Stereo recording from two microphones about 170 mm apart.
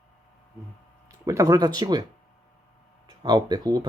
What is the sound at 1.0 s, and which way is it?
Speech, 20° right (ahead or behind).